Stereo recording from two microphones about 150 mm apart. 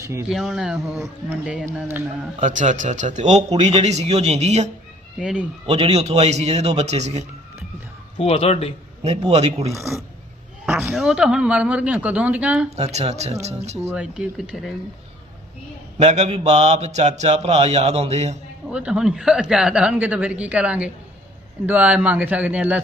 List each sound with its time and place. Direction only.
0.2 s speech: 5° right (ahead or behind)
2.4 s speech: 55° right (ahead or behind)
5.2 s speech: 5° right (ahead or behind)
5.6 s speech: 45° right (ahead or behind)
8.2 s speech: 40° left (ahead or behind)
9.0 s speech: 45° right (ahead or behind)
10.9 s speech: 5° right (ahead or behind)
12.7 s speech: 45° right (ahead or behind)
13.9 s speech: 10° right (ahead or behind)
16.0 s speech: 50° right (ahead or behind)
18.7 s speech: 5° right (ahead or behind)